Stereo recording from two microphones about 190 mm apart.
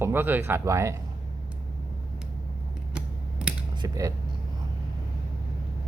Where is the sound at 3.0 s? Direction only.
5° right (ahead or behind).